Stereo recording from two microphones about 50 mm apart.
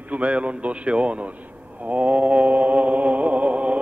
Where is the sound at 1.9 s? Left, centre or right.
Right.